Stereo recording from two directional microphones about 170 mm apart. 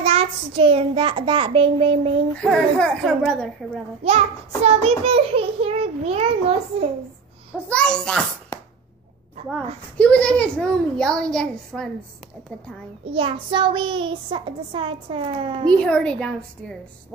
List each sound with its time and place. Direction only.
0.0 s child singing: 35° right (ahead or behind)
2.3 s a child's voice: 5° left (ahead or behind)
4.0 s child singing: 35° right (ahead or behind)
7.7 s a child's voice: 5° left (ahead or behind)
9.9 s a child's voice: 5° left (ahead or behind)
13.0 s a child's voice: 30° right (ahead or behind)
15.6 s a child's voice: 5° left (ahead or behind)